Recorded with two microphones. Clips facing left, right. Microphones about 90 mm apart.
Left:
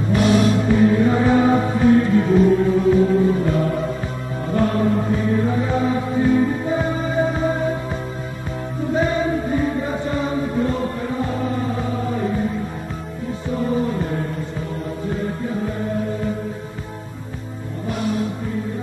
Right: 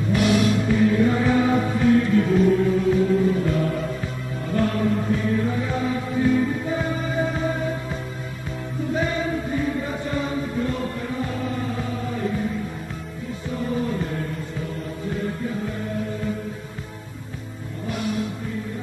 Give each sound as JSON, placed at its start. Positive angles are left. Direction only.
{"t": 0.1, "sound": "music", "side_deg": 35}
{"t": 8.9, "sound": "chant", "side_deg": 30}
{"t": 13.6, "sound": "music", "side_deg": 30}